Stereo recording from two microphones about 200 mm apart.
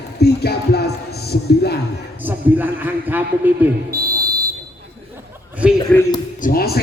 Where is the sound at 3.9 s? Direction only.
50° right (ahead or behind).